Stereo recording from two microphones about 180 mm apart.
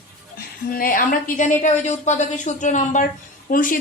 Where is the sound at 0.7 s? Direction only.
50° left (ahead or behind).